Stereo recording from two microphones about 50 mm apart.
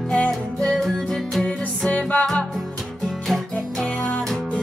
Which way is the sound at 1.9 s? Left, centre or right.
Left.